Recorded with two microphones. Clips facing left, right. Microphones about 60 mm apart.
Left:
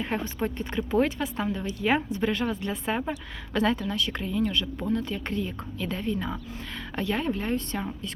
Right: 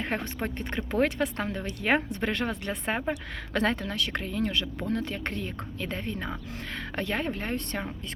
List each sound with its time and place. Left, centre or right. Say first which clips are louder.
0.0 s speech: left 2 dB; right